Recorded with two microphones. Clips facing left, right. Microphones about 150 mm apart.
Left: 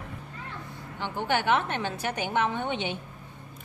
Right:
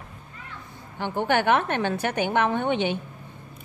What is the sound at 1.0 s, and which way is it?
A woman's voice, 55° right (ahead or behind).